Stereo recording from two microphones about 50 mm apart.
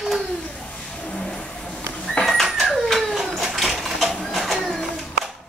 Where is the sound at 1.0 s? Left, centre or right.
Centre.